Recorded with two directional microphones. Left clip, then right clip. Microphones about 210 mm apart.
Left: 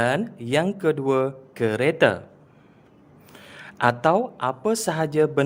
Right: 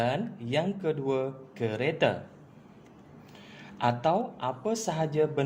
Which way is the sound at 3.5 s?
45° left (ahead or behind).